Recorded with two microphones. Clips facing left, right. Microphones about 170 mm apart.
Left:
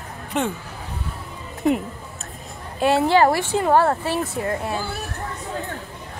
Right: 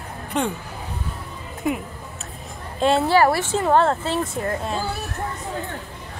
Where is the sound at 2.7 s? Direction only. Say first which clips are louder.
Left 1 dB; 10° left (ahead or behind).